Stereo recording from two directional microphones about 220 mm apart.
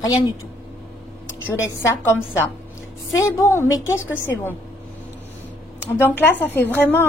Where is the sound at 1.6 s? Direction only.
10° left (ahead or behind).